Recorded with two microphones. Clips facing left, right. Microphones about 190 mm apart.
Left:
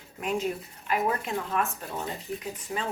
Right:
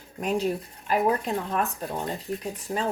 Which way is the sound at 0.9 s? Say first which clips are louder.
Right 4 dB; 35° right (ahead or behind).